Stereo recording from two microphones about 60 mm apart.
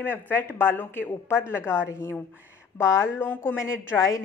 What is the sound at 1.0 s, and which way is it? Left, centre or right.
Speech, left.